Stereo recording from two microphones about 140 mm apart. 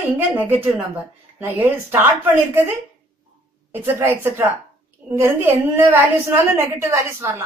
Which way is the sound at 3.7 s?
15° right (ahead or behind).